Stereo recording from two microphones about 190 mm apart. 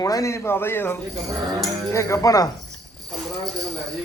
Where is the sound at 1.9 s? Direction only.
15° left (ahead or behind).